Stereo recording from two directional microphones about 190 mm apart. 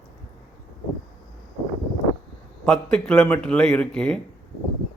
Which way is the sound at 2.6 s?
5° left (ahead or behind).